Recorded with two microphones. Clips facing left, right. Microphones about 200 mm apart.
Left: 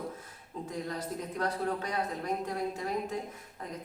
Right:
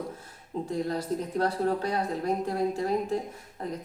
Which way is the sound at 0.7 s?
30° right (ahead or behind).